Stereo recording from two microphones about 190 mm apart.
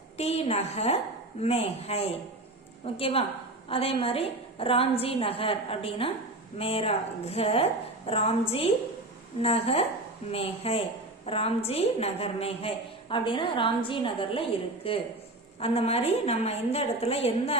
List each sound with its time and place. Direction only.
0.2 s a woman's voice: 35° left (ahead or behind)